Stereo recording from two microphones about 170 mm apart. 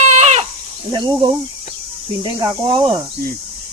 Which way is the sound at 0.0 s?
40° right (ahead or behind).